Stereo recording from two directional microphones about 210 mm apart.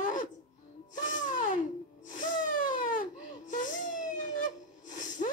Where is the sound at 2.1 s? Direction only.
35° left (ahead or behind).